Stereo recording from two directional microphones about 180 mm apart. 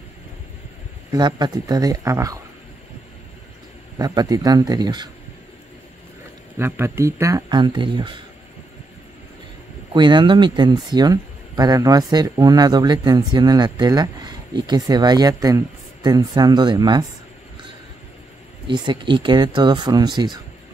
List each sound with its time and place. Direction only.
1.1 s speech: 20° right (ahead or behind)
4.0 s speech: 20° right (ahead or behind)
6.6 s speech: 15° right (ahead or behind)
9.9 s speech: 25° right (ahead or behind)
18.7 s speech: 25° right (ahead or behind)